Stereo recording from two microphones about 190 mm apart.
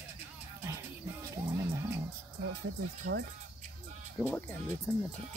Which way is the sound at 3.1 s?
90° right.